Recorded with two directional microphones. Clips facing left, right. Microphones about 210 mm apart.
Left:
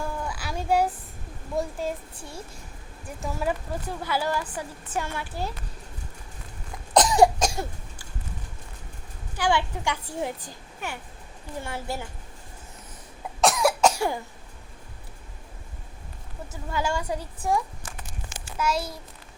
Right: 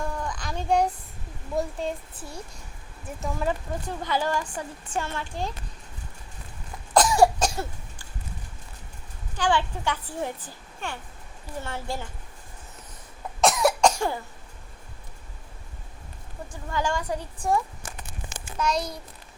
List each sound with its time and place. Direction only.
0.0 s cat: 5° left (ahead or behind)
1.5 s a woman's voice: centre (ahead or behind)
6.9 s cough: 20° left (ahead or behind)
9.3 s a woman's voice: 10° left (ahead or behind)
13.4 s cough: centre (ahead or behind)
16.5 s a woman's voice: 10° left (ahead or behind)